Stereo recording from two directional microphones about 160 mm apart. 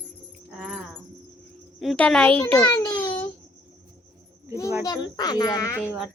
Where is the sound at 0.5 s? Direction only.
5° right (ahead or behind).